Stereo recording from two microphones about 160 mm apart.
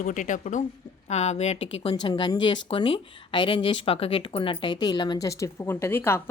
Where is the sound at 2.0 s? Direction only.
25° left (ahead or behind).